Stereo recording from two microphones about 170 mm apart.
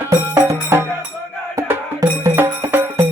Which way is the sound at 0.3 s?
15° right (ahead or behind).